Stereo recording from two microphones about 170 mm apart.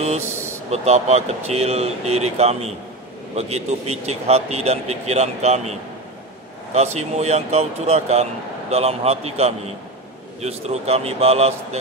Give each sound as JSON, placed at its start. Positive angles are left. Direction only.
{"t": 0.7, "sound": "speech", "side_deg": -40}